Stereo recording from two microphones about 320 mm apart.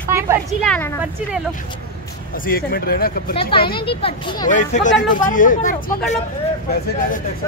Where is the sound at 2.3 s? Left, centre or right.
Left.